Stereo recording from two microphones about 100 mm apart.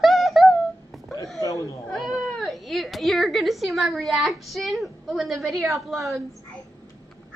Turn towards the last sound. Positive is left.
turn(degrees=0)  # may be behind; listen again after turning